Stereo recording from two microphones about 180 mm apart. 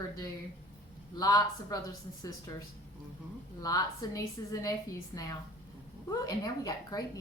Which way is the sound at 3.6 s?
20° left (ahead or behind).